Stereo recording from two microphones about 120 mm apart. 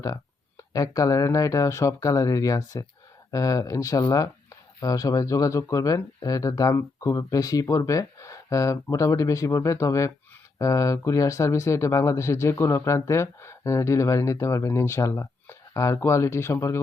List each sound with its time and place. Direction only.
0.7 s speech: 30° left (ahead or behind)